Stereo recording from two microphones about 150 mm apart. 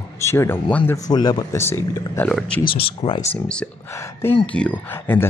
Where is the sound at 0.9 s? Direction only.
25° left (ahead or behind).